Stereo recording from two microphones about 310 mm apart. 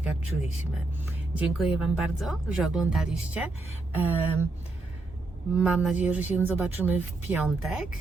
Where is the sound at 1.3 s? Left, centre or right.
Centre.